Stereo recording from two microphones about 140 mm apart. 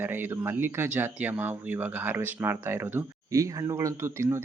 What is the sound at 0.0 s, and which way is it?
Speech, 15° right (ahead or behind).